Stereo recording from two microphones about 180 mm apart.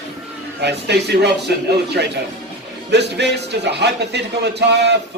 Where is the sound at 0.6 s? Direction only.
70° right (ahead or behind).